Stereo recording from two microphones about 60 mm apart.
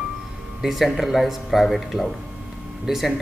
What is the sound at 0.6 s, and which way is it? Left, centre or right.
A man's voice, centre.